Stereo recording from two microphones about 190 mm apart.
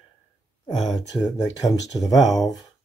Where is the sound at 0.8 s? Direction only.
Centre (ahead or behind).